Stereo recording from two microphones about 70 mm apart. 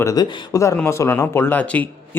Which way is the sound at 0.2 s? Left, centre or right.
Left.